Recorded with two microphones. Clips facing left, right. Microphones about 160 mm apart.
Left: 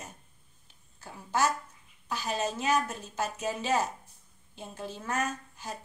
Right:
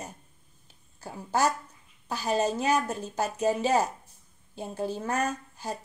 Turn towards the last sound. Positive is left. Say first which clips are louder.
# right 5 dB
turn(degrees=-35)  # may be behind; listen again after turning